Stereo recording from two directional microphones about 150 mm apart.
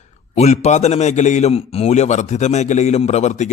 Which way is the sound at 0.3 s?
45° left (ahead or behind).